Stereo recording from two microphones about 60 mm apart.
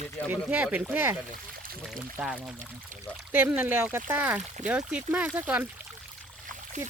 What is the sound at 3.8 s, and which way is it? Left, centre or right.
Speech, right.